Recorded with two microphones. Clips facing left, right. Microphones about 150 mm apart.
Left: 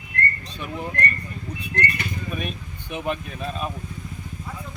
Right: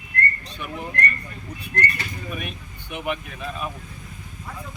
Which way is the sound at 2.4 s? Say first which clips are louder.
Left 3 dB; 30° left (ahead or behind).